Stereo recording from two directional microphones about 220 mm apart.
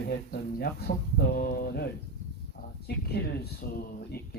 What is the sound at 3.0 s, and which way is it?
Speech, 45° left (ahead or behind).